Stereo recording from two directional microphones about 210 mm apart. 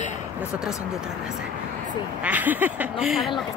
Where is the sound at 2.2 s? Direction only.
10° right (ahead or behind).